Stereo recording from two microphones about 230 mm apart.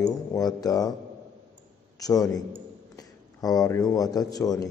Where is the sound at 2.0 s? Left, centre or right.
Centre.